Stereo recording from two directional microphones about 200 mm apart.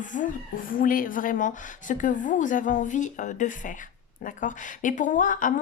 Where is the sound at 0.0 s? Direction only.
40° left (ahead or behind).